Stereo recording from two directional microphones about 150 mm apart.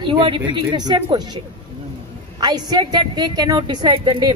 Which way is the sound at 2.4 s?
25° right (ahead or behind).